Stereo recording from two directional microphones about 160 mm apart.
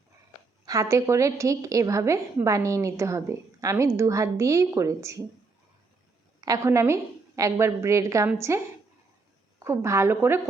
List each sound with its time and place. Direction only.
0.6 s a woman's voice: 20° right (ahead or behind)
6.4 s a woman's voice: 20° right (ahead or behind)